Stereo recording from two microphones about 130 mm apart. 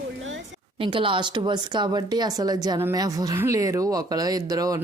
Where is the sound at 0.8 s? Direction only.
40° right (ahead or behind).